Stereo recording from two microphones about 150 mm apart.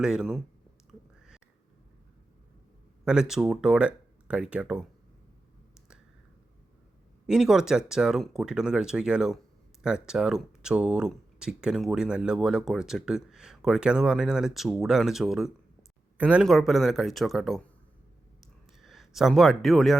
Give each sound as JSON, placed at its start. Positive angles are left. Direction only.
{"t": 0.0, "sound": "speech", "side_deg": -5}
{"t": 3.0, "sound": "speech", "side_deg": -5}
{"t": 7.3, "sound": "speech", "side_deg": -5}
{"t": 18.3, "sound": "a sound", "side_deg": 0}